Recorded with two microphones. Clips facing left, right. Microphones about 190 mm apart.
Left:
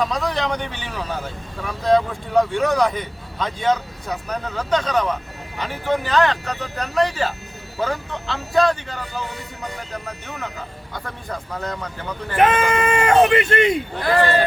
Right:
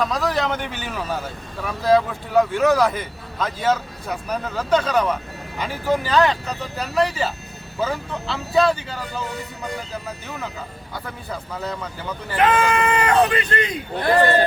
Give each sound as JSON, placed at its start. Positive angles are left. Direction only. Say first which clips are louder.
{"t": 0.0, "sound": "a man's voice", "louder": "right 1 dB", "side_deg": 0}
{"t": 1.8, "sound": "a man's voice", "louder": "even", "side_deg": -5}
{"t": 10.9, "sound": "a man's voice", "louder": "even", "side_deg": -5}
{"t": 12.4, "sound": "speech", "louder": "left 1 dB", "side_deg": 25}
{"t": 14.0, "sound": "speech", "louder": "right 2 dB", "side_deg": -25}